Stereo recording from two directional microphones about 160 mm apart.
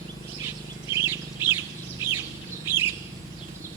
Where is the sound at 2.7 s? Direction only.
15° right (ahead or behind).